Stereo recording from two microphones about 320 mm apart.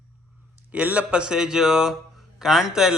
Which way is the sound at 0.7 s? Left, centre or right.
Centre.